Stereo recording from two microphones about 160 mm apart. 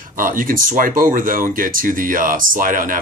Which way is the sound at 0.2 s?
60° right (ahead or behind).